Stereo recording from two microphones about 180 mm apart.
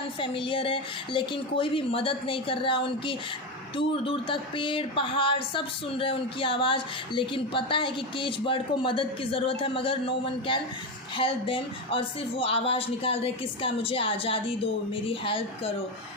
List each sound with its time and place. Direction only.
0.2 s a woman's voice: 30° left (ahead or behind)